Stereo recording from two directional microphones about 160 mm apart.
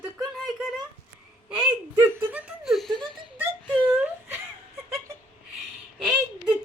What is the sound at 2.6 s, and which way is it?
Laughter, centre (ahead or behind).